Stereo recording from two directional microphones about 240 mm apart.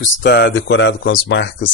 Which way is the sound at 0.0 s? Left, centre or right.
Left.